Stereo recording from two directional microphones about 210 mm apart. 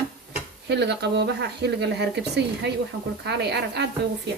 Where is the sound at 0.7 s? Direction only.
50° right (ahead or behind).